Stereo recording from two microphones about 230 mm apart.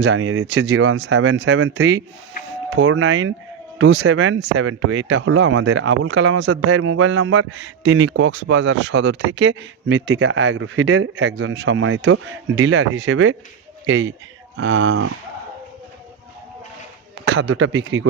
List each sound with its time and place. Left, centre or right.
0.0 s speech: right
17.2 s speech: right